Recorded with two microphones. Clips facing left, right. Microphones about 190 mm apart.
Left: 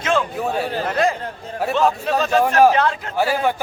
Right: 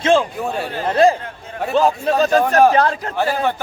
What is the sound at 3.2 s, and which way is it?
Speech, 10° left (ahead or behind).